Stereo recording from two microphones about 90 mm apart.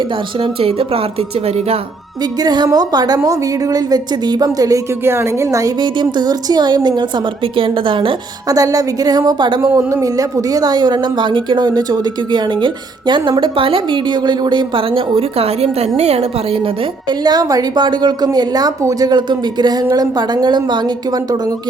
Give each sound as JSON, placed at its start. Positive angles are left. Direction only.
{"t": 0.4, "sound": "speech", "side_deg": -90}
{"t": 2.4, "sound": "speech", "side_deg": -50}
{"t": 5.0, "sound": "a woman's voice", "side_deg": -30}
{"t": 5.8, "sound": "speech", "side_deg": -55}
{"t": 7.5, "sound": "a woman's voice", "side_deg": -75}
{"t": 8.4, "sound": "speech", "side_deg": -40}
{"t": 9.6, "sound": "speech", "side_deg": -35}
{"t": 13.4, "sound": "a woman's voice", "side_deg": -75}
{"t": 17.1, "sound": "speech", "side_deg": -50}